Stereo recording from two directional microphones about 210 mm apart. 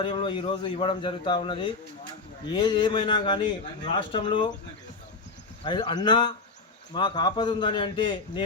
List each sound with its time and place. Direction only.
0.0 s a man's voice: 25° left (ahead or behind)
5.6 s a man's voice: 20° left (ahead or behind)